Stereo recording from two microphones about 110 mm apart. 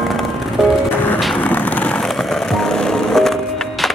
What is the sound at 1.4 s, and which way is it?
Music, 15° left (ahead or behind).